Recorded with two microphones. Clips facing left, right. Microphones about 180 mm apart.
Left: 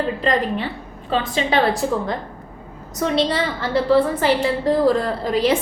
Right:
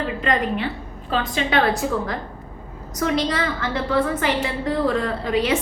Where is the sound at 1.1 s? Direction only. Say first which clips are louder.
Left 2 dB; 30° left (ahead or behind).